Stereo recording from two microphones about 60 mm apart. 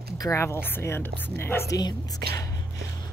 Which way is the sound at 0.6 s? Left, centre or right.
Left.